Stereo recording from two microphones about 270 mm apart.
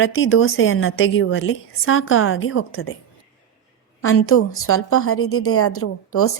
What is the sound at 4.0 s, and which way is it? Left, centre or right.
A woman's voice, left.